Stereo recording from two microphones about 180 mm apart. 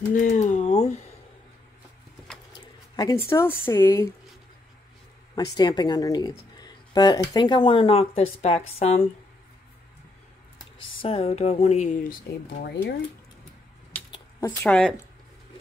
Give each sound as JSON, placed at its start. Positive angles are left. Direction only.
{"t": 0.1, "sound": "speech", "side_deg": 45}
{"t": 2.5, "sound": "a sound", "side_deg": 20}
{"t": 3.3, "sound": "speech", "side_deg": 15}
{"t": 5.3, "sound": "speech", "side_deg": 20}
{"t": 11.0, "sound": "speech", "side_deg": 35}
{"t": 14.1, "sound": "a sound", "side_deg": 15}